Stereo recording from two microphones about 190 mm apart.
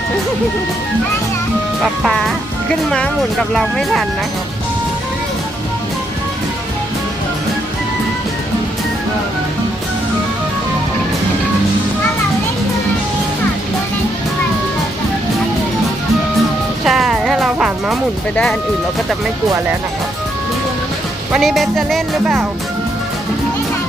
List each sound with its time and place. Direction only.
1.8 s music: centre (ahead or behind)
3.5 s music: centre (ahead or behind)
16.8 s music: centre (ahead or behind)
21.3 s music: centre (ahead or behind)